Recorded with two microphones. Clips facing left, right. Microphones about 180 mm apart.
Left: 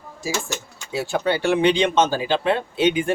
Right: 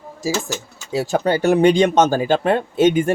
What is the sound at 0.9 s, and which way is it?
Speech, 40° right (ahead or behind).